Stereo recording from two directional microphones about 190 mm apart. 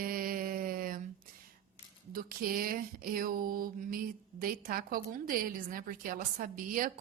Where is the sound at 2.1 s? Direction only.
50° right (ahead or behind).